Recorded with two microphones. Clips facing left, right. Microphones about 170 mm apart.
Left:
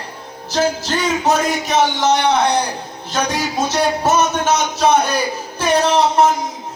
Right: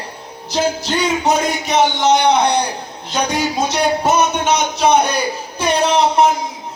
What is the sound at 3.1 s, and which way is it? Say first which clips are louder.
A man's voice: right 1 dB; 15° right (ahead or behind).